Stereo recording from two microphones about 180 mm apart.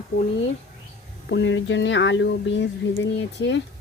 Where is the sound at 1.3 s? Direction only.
85° left.